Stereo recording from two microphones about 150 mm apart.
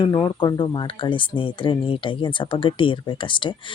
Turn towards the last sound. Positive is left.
turn(degrees=35)  # may be behind; listen again after turning